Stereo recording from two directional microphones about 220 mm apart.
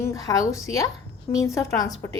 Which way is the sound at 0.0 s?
15° left (ahead or behind).